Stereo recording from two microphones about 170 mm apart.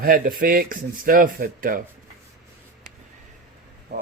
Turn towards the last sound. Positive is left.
turn(degrees=-75)  # may be behind; listen again after turning